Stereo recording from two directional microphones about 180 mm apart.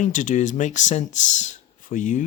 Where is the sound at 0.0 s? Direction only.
45° left (ahead or behind).